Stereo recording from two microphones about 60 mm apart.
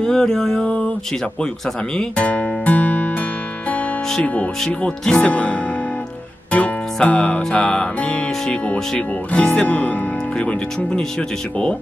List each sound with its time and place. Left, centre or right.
0.0 s speech: centre
2.0 s music: left
7.0 s music: centre
8.7 s speech: centre